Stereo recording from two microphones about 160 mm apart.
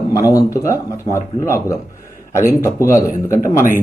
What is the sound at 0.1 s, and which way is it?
A man's voice, 20° left (ahead or behind).